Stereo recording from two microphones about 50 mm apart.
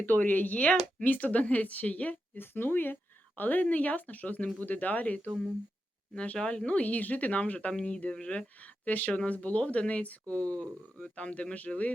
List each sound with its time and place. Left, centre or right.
0.0 s speech: left
2.4 s speech: left
7.7 s speech: centre